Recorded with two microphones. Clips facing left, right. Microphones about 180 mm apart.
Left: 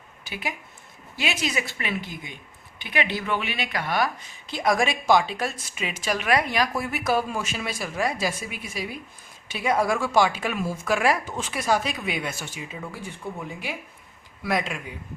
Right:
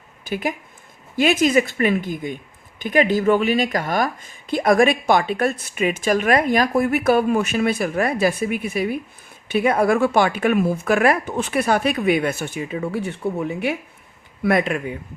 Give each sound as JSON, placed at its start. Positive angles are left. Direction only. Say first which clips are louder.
{"t": 0.3, "sound": "a woman's voice", "louder": "right 9 dB", "side_deg": -50}